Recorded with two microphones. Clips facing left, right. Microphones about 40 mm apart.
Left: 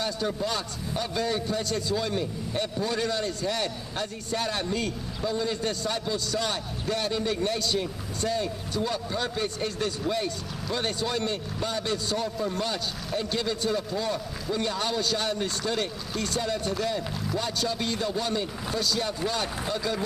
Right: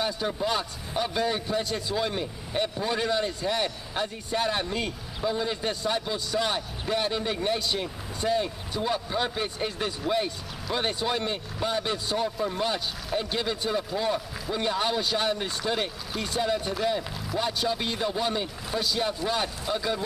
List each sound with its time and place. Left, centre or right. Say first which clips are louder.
0.0 s a man's voice: right 1 dB; centre